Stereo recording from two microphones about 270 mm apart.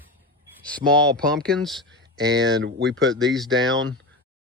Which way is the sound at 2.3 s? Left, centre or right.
Right.